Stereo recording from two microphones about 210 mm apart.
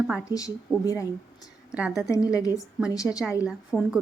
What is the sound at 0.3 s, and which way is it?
Speech, 15° left (ahead or behind).